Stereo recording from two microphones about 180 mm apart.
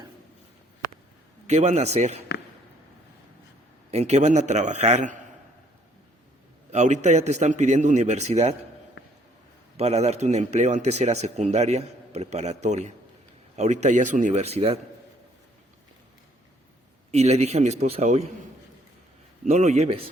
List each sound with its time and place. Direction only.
1.5 s a man's voice: 40° right (ahead or behind)
3.9 s a man's voice: 40° right (ahead or behind)
6.7 s a man's voice: 40° right (ahead or behind)
9.7 s a man's voice: 35° right (ahead or behind)
17.1 s a man's voice: 35° right (ahead or behind)
19.5 s a man's voice: 40° right (ahead or behind)